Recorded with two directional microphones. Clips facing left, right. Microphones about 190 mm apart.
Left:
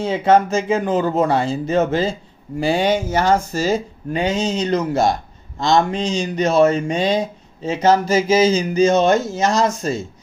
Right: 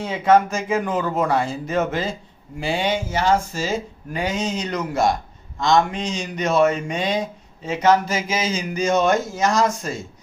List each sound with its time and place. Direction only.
0.0 s speech: 30° left (ahead or behind)
2.6 s speech: 40° left (ahead or behind)
4.1 s speech: 25° left (ahead or behind)